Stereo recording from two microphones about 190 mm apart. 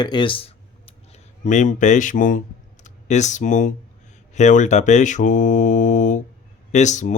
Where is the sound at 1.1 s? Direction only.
40° left (ahead or behind).